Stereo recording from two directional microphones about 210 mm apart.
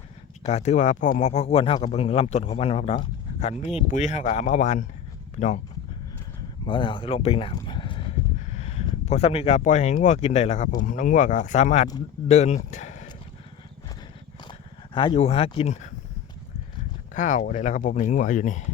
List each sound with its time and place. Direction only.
0.4 s speech: 30° left (ahead or behind)
6.7 s speech: 20° left (ahead or behind)
12.3 s a sound: 30° left (ahead or behind)
14.9 s speech: 25° left (ahead or behind)
17.2 s speech: 35° left (ahead or behind)